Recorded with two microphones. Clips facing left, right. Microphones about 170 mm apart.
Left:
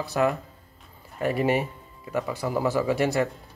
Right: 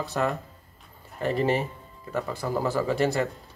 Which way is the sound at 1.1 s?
10° left (ahead or behind).